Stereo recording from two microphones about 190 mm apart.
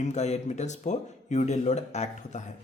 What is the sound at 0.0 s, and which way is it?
Speech, 35° left (ahead or behind).